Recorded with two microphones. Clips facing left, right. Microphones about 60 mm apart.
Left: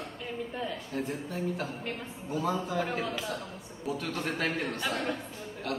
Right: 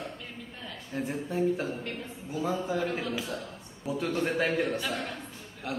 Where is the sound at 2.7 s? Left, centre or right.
Centre.